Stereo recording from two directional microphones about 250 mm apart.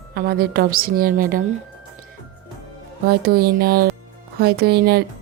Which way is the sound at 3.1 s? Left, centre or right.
Right.